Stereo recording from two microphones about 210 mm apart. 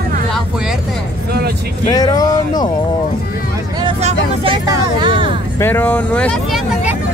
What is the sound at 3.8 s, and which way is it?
Speech, 30° right (ahead or behind).